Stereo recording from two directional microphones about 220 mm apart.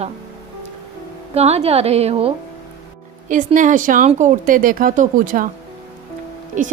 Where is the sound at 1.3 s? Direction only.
30° right (ahead or behind).